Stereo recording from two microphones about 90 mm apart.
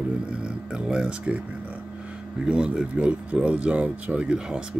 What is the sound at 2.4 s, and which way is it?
Speech, 10° right (ahead or behind).